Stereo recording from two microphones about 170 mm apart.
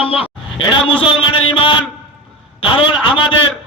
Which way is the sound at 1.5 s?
30° left (ahead or behind).